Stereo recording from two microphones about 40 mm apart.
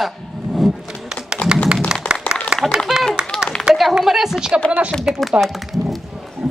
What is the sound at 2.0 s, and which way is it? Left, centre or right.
Applause, left.